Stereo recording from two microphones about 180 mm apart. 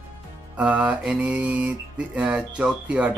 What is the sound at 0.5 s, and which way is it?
Mantra, 5° right (ahead or behind).